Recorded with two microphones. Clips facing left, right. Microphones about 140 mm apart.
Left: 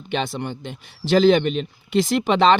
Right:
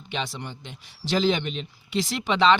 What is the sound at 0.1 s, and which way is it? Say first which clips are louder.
A man's voice: left 7 dB; 55° left (ahead or behind).